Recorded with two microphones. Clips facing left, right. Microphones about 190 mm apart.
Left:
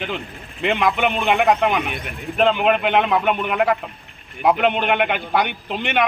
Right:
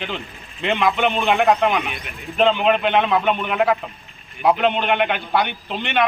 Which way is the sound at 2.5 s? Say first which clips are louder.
Even; 10° left (ahead or behind).